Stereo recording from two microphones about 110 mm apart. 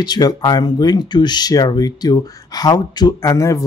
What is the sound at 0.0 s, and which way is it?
Speech, 40° left (ahead or behind).